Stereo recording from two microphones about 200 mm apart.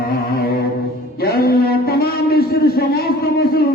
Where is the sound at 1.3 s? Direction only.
50° left (ahead or behind).